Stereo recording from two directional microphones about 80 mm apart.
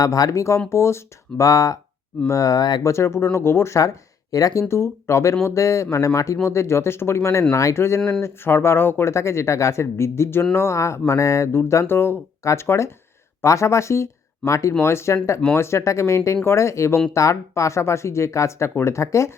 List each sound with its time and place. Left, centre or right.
0.0 s speech: left
2.8 s speech: left
4.7 s speech: left